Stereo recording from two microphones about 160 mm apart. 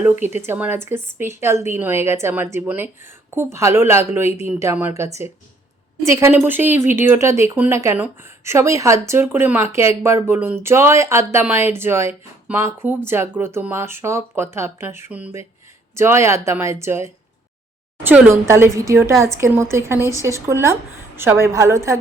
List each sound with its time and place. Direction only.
0.0 s speech: 10° right (ahead or behind)